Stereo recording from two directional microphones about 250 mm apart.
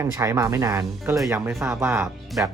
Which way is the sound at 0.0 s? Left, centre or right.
Centre.